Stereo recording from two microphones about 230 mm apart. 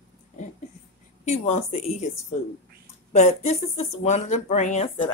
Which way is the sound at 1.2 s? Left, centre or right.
Left.